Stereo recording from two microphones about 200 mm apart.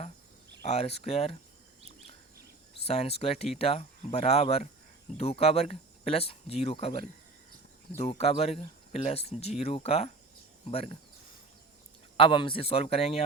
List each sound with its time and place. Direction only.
0.6 s speech: 30° left (ahead or behind)
2.8 s speech: 30° left (ahead or behind)
12.1 s speech: 25° left (ahead or behind)